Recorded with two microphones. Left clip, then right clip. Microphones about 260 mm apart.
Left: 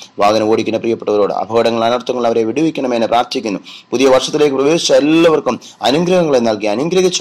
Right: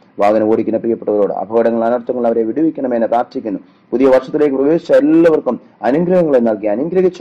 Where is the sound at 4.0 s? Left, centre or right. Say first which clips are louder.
Even; left.